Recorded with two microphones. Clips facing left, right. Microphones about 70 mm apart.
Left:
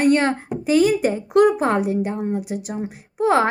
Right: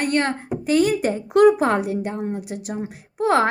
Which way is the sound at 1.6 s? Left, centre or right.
Centre.